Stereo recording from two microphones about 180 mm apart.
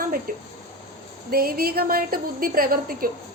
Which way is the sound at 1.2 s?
55° right (ahead or behind).